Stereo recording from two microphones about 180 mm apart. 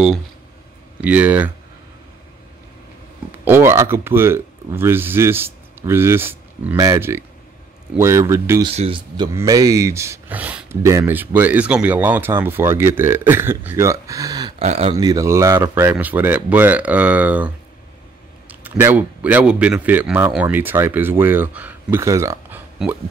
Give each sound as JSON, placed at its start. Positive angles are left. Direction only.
{"t": 1.0, "sound": "speech", "side_deg": -10}
{"t": 3.4, "sound": "speech", "side_deg": -15}
{"t": 8.6, "sound": "speech", "side_deg": -30}
{"t": 14.6, "sound": "speech", "side_deg": -35}
{"t": 15.0, "sound": "speech", "side_deg": -20}
{"t": 18.5, "sound": "speech", "side_deg": -10}